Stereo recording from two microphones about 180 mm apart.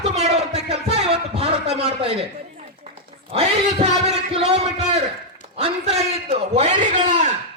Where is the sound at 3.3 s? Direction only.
35° right (ahead or behind).